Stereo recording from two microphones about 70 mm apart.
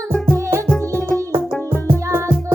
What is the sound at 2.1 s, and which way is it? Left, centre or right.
Music, right.